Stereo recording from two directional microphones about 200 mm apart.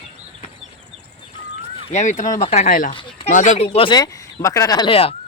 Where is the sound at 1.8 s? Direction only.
35° left (ahead or behind).